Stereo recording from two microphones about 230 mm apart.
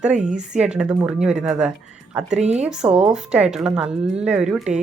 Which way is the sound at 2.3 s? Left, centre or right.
Right.